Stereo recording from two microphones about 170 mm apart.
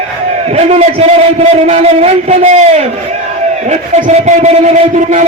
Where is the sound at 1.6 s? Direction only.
40° right (ahead or behind).